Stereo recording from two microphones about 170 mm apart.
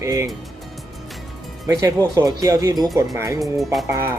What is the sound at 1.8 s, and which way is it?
Speech, 20° right (ahead or behind).